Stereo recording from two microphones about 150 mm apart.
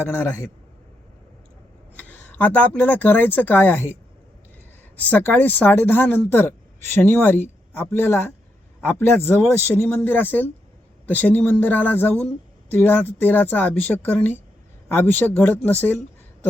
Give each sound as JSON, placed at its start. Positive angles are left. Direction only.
{"t": 0.1, "sound": "a man's voice", "side_deg": 15}
{"t": 2.0, "sound": "speech", "side_deg": 10}
{"t": 4.9, "sound": "speech", "side_deg": 10}